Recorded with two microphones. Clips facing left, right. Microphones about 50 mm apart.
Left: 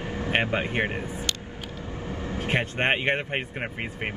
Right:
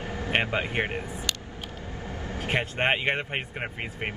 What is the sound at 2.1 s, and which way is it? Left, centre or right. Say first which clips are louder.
Vehicle: left 3 dB; left.